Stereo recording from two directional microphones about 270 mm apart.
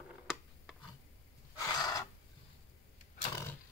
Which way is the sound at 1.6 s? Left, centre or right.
Centre.